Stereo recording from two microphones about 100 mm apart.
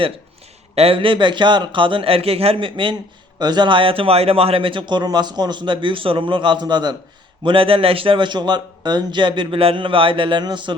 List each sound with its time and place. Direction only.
0.8 s speech: 65° right (ahead or behind)
3.3 s speech: 45° right (ahead or behind)
7.4 s speech: 65° right (ahead or behind)